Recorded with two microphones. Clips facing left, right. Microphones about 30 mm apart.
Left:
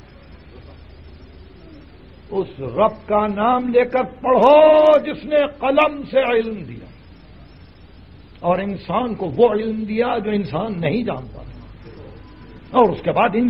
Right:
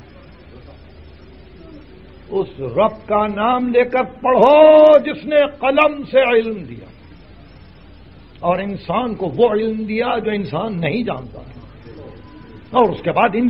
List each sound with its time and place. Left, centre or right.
2.3 s a man's voice: centre
8.4 s a man's voice: centre
11.3 s a sound: centre
12.0 s music: right
12.7 s a man's voice: centre